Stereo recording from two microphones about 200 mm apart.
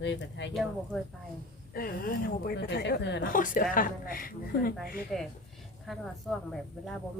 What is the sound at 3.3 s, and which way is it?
Speech, 45° left (ahead or behind).